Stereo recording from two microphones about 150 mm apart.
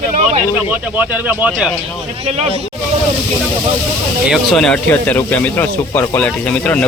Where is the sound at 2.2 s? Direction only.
45° right (ahead or behind).